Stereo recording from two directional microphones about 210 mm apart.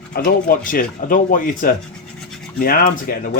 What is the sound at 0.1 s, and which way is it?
Speech, 45° left (ahead or behind).